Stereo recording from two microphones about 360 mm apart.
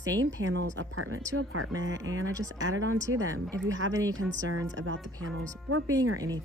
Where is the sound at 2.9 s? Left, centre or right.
Centre.